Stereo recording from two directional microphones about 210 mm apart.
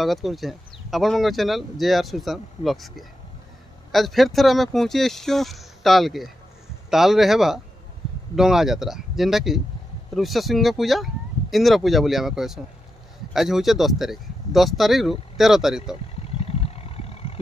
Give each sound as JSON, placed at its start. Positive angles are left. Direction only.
{"t": 0.0, "sound": "speech", "side_deg": 0}
{"t": 16.4, "sound": "vehicle", "side_deg": 30}